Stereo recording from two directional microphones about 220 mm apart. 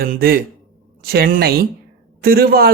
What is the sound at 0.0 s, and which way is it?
Speech, 45° right (ahead or behind).